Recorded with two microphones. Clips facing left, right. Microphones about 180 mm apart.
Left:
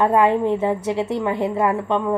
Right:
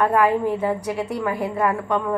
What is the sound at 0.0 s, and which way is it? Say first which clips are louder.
A woman's voice: left 2 dB; 25° left (ahead or behind).